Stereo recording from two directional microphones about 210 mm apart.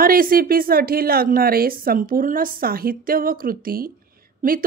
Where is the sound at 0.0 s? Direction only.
45° right (ahead or behind).